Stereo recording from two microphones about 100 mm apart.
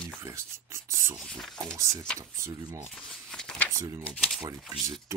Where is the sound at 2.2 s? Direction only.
30° right (ahead or behind).